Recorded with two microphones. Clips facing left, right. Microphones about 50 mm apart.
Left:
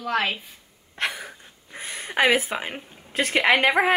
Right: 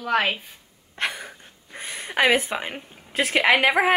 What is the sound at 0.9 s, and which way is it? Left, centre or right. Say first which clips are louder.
A woman's voice: even; centre.